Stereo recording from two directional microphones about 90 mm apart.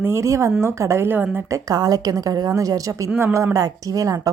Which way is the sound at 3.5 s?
40° right (ahead or behind).